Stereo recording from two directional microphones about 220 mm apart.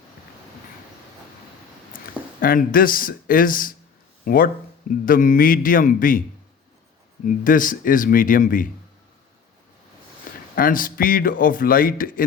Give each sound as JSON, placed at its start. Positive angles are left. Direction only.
{"t": 2.4, "sound": "speech", "side_deg": 40}
{"t": 7.3, "sound": "speech", "side_deg": 40}
{"t": 10.5, "sound": "speech", "side_deg": 40}